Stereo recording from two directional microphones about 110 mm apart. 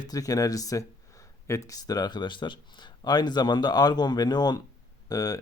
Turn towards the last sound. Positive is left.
turn(degrees=35)  # may be behind; listen again after turning